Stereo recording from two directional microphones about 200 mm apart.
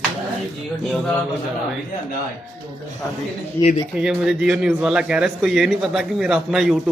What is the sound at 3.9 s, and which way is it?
A man's voice, 5° right (ahead or behind).